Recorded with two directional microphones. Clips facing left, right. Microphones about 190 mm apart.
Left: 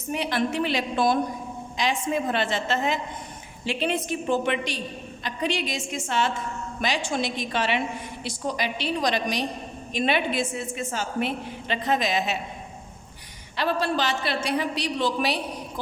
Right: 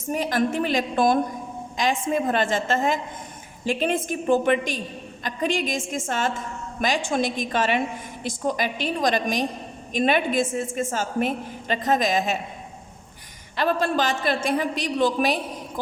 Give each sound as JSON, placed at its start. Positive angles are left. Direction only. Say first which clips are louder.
{"t": 0.1, "sound": "a woman's voice", "louder": "right 3 dB", "side_deg": -45}
{"t": 13.6, "sound": "a woman's voice", "louder": "right 2 dB", "side_deg": -50}